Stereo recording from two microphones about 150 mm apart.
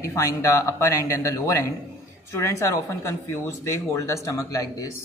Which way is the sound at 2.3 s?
20° left (ahead or behind).